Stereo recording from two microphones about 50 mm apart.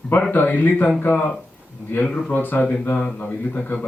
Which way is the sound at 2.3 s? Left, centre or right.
Left.